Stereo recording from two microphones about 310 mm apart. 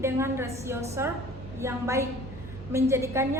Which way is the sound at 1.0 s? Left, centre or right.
Centre.